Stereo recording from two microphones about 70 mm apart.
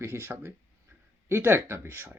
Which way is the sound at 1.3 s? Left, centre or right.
Right.